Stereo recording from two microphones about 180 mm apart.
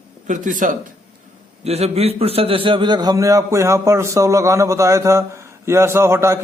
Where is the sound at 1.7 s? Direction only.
35° right (ahead or behind).